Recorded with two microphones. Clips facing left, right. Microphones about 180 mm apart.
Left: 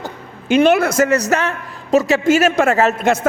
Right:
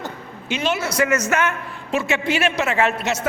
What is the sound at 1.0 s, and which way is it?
A man's voice, 35° left (ahead or behind).